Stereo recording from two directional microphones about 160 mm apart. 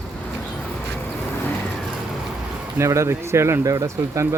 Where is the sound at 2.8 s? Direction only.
20° right (ahead or behind).